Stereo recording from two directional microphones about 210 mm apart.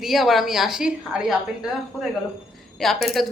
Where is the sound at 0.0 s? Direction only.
Centre (ahead or behind).